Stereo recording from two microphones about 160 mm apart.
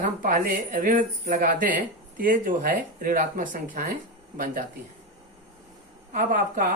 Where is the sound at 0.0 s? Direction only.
55° right (ahead or behind).